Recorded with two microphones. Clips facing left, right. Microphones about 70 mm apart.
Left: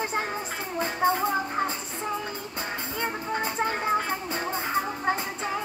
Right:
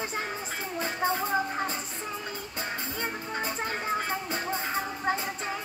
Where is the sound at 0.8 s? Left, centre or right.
Left.